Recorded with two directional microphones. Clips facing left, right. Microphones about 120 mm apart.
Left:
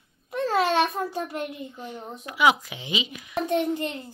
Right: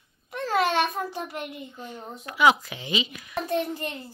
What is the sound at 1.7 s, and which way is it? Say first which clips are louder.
A woman's voice: left 2 dB; 10° left (ahead or behind).